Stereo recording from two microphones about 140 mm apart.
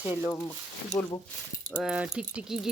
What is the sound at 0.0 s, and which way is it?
Speech, 15° right (ahead or behind).